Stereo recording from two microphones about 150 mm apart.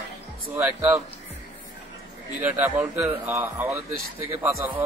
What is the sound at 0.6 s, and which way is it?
Speech, 15° right (ahead or behind).